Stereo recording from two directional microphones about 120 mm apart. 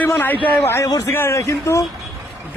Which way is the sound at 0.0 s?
15° left (ahead or behind).